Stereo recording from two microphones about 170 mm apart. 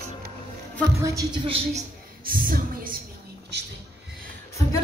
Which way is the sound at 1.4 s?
35° right (ahead or behind).